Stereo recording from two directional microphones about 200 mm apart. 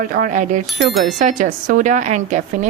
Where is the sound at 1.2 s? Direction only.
40° right (ahead or behind).